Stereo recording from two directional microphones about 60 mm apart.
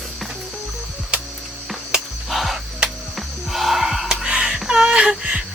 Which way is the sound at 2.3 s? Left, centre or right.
Centre.